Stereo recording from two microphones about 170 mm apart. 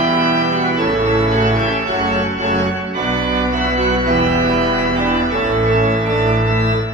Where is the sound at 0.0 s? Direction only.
40° right (ahead or behind).